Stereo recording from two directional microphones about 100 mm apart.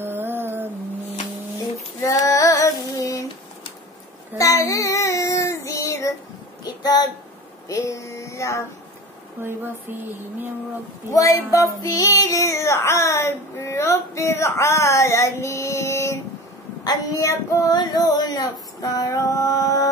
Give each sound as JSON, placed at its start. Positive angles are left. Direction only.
{"t": 0.0, "sound": "a sound", "side_deg": -20}
{"t": 2.0, "sound": "female singing", "side_deg": 35}
{"t": 4.4, "sound": "child singing", "side_deg": 35}
{"t": 6.6, "sound": "speech", "side_deg": 40}
{"t": 7.6, "sound": "child singing", "side_deg": 30}
{"t": 9.4, "sound": "speech", "side_deg": -20}
{"t": 11.1, "sound": "child singing", "side_deg": 35}
{"t": 16.8, "sound": "female singing", "side_deg": 40}